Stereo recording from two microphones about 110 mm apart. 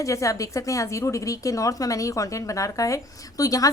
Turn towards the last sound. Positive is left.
turn(degrees=35)  # may be behind; listen again after turning